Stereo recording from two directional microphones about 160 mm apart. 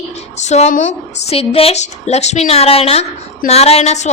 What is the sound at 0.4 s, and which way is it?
A woman's voice, 45° left (ahead or behind).